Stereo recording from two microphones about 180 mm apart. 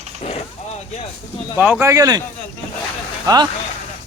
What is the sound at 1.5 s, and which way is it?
Speech, 10° right (ahead or behind).